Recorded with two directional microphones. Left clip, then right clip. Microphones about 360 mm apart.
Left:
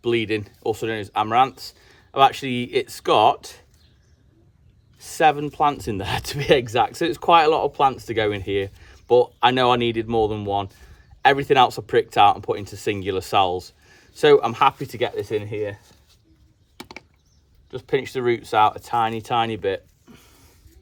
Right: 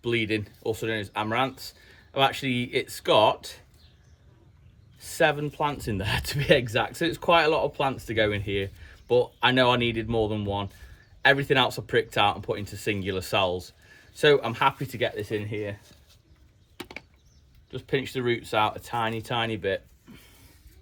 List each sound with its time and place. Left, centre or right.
0.0 s speech: centre
4.9 s speech: centre
17.7 s speech: centre